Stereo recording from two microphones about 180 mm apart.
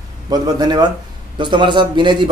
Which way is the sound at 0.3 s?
20° right (ahead or behind).